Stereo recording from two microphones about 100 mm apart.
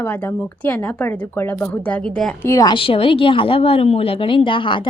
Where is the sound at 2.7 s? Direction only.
65° left (ahead or behind).